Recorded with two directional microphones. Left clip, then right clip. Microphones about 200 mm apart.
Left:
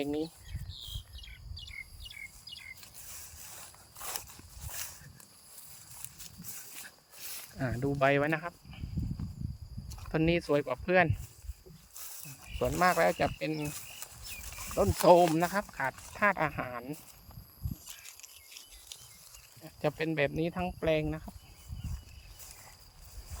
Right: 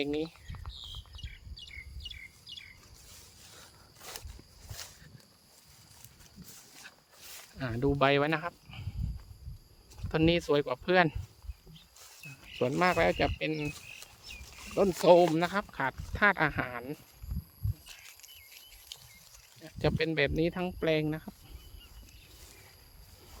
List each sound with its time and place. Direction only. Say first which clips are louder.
0.0 s speech: right 1 dB; 10° right (ahead or behind)
0.7 s bird: left 1 dB; 5° right (ahead or behind)
2.5 s chirp: right 5 dB; 5° left (ahead or behind)
3.1 s a sound: left 3 dB; 50° left (ahead or behind)
6.0 s a sound: left 8 dB; 50° left (ahead or behind)
7.2 s cricket: left 4 dB; 30° left (ahead or behind)
7.6 s speech: right 1 dB; 20° right (ahead or behind); by 8.9 s 35° right (ahead or behind)
10.1 s speech: right 2 dB; 25° right (ahead or behind)
11.9 s a sound: even; 55° left (ahead or behind)
12.8 s speech: left 1 dB; 25° right (ahead or behind)
13.7 s a sound: right 2 dB; 45° left (ahead or behind)
15.0 s speech: even; 15° right (ahead or behind); by 17.0 s 40° right (ahead or behind)
17.8 s horse: even; 15° left (ahead or behind)
19.6 s speech: right 2 dB; 25° right (ahead or behind)